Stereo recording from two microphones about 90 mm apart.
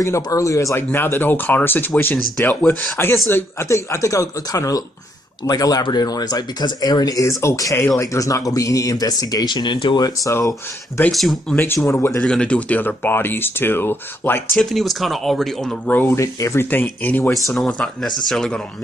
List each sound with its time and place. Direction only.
0.0 s speech: 35° left (ahead or behind)
0.9 s speech: 25° left (ahead or behind); by 10.0 s 60° left (ahead or behind)
11.1 s speech: centre (ahead or behind)
11.5 s speech: 25° left (ahead or behind)
12.2 s speech: 10° left (ahead or behind)
14.5 s speech: centre (ahead or behind)
15.9 s speech: 20° left (ahead or behind)
16.2 s speech: 35° left (ahead or behind)
16.7 s speech: 20° left (ahead or behind)
17.3 s speech: centre (ahead or behind)